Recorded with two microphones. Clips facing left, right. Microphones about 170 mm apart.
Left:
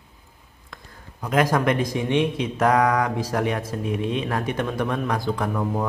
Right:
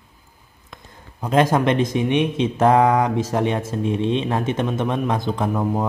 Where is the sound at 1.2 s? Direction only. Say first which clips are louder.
Right 3 dB; 25° right (ahead or behind).